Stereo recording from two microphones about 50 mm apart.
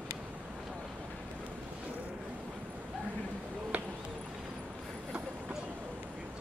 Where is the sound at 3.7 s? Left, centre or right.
Right.